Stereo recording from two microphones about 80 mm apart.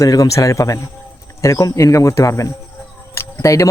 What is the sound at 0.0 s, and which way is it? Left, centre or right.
A man's voice, left.